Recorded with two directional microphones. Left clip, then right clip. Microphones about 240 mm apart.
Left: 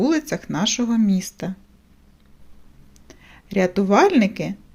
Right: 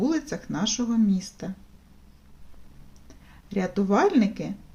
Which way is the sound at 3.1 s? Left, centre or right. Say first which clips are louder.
Left 6 dB; left.